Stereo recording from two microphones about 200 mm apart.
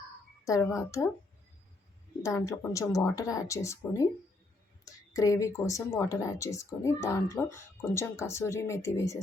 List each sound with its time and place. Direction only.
0.4 s speech: 15° left (ahead or behind)
2.2 s speech: 15° left (ahead or behind)